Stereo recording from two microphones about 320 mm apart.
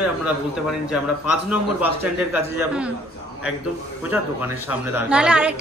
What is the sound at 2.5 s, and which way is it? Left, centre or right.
Speech, centre.